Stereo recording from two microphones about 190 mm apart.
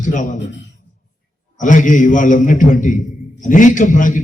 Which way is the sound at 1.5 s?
40° left (ahead or behind).